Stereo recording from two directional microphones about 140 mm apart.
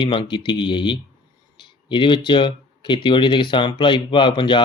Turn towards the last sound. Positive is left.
turn(degrees=35)  # may be behind; listen again after turning